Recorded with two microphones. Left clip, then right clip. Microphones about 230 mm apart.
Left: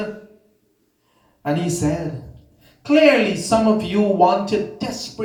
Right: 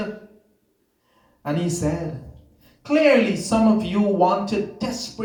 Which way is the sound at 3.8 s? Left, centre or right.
Left.